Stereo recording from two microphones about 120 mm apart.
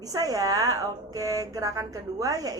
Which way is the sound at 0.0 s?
30° right (ahead or behind).